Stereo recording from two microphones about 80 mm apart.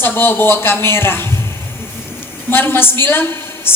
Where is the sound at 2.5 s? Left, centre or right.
Left.